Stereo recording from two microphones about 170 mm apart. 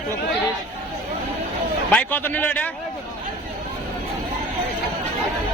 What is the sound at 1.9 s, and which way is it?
Speech, 10° left (ahead or behind).